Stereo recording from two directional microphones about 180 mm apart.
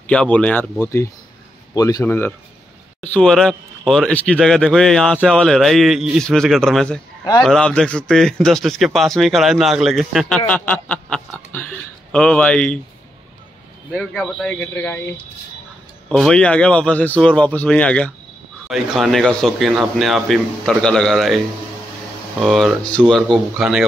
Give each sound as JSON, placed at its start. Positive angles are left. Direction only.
{"t": 0.0, "sound": "a man's voice", "side_deg": 5}
{"t": 1.8, "sound": "a man's voice", "side_deg": 20}
{"t": 13.9, "sound": "a man's voice", "side_deg": 5}
{"t": 22.4, "sound": "speech", "side_deg": 0}